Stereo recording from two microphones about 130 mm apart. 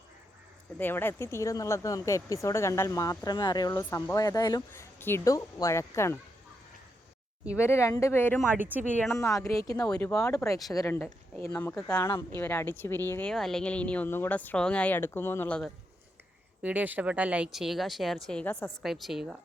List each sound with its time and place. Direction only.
0.8 s speech: 15° left (ahead or behind)
4.9 s speech: 20° left (ahead or behind)
7.6 s speech: 20° left (ahead or behind)
8.5 s speech: 15° right (ahead or behind)
9.1 s speech: 25° left (ahead or behind); by 11.9 s 10° left (ahead or behind)
11.9 s speech: 20° left (ahead or behind)
13.3 s speech: 5° left (ahead or behind)
16.6 s a woman's voice: 10° right (ahead or behind); by 18.7 s 10° left (ahead or behind)
18.8 s a woman's voice: centre (ahead or behind)